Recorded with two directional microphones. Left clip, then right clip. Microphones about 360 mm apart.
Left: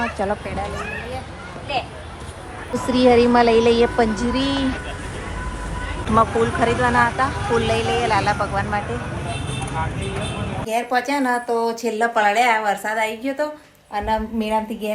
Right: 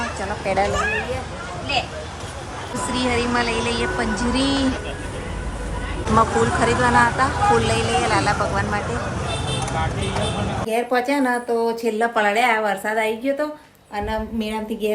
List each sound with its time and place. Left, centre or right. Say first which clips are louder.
2.9 s speech: left 8 dB; centre
4.4 s speech: right 1 dB; right
6.1 s speech: even; centre
10.7 s speech: even; centre
11.4 s speech: even; centre
11.7 s speech: even; centre